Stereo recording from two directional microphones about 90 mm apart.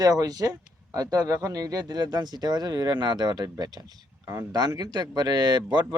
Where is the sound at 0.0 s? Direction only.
45° right (ahead or behind).